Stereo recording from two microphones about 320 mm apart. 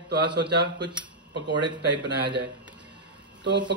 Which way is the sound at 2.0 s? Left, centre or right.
Right.